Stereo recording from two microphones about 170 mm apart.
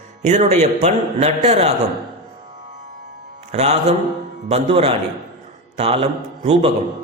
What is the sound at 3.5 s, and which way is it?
A man's voice, 40° right (ahead or behind).